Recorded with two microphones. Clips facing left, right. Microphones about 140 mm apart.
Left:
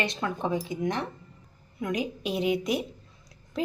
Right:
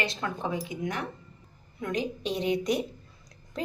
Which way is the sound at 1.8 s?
10° left (ahead or behind).